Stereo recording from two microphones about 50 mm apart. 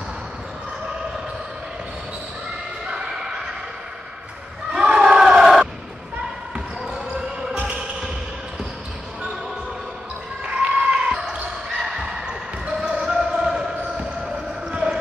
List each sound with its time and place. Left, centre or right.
2.9 s basketball bounce: centre
4.7 s crowd: centre
6.5 s basketball bounce: centre
10.4 s basketball bounce: centre